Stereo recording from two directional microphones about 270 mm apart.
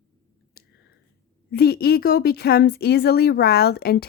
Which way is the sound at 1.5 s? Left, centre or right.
Left.